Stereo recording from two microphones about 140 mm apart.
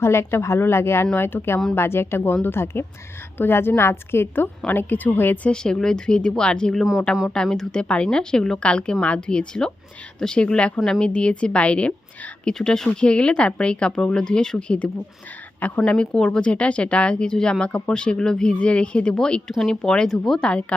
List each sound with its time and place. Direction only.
0.0 s a woman's voice: 20° left (ahead or behind)